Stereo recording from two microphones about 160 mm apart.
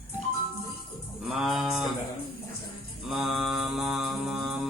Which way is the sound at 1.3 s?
Centre (ahead or behind).